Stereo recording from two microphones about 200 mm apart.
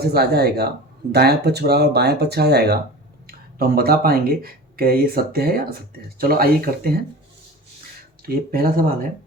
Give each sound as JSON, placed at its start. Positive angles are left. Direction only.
{"t": 0.0, "sound": "speech", "side_deg": -50}
{"t": 8.2, "sound": "speech", "side_deg": -45}